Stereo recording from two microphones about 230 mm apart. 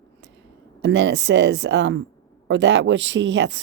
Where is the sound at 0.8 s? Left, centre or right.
Right.